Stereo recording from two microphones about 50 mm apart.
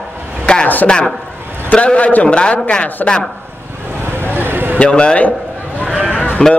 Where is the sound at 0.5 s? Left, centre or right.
Left.